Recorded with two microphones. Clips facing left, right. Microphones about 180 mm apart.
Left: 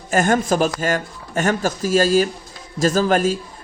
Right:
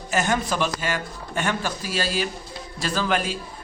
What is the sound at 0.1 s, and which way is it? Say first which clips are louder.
A man's voice: left 6 dB; 50° left (ahead or behind).